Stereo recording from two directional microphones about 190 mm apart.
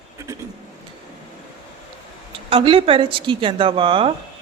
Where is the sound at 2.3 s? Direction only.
25° right (ahead or behind).